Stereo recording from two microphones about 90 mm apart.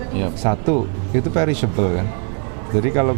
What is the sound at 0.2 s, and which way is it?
Speech, 20° right (ahead or behind).